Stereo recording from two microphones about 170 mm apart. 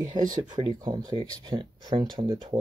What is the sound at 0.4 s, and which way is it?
Speech, 25° right (ahead or behind).